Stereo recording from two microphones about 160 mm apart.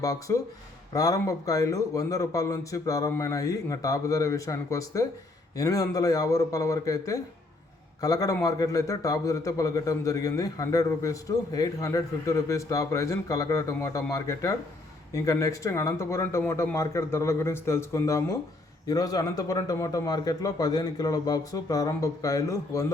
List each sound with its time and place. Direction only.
0.0 s a man's voice: 20° left (ahead or behind)